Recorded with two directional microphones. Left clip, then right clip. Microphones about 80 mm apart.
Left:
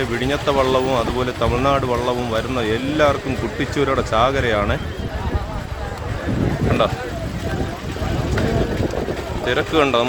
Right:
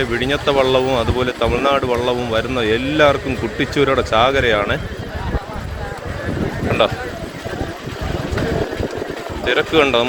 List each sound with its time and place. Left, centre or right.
0.2 s speech: centre
9.5 s speech: centre